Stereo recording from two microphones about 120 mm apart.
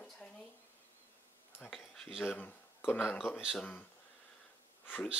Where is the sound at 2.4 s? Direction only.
15° left (ahead or behind).